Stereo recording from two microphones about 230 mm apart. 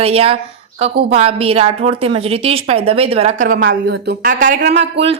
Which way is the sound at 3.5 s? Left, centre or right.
Right.